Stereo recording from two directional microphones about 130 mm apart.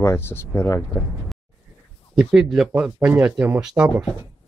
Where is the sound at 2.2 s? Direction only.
5° right (ahead or behind).